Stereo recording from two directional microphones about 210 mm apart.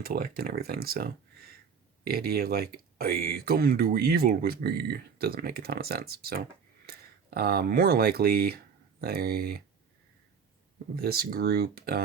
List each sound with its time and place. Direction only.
0.0 s speech: 45° right (ahead or behind)
10.9 s speech: 45° right (ahead or behind)